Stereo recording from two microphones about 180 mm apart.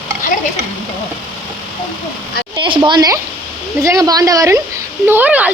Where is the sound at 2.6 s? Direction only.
25° right (ahead or behind).